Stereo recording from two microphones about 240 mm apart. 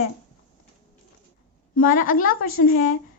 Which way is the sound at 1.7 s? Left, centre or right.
Left.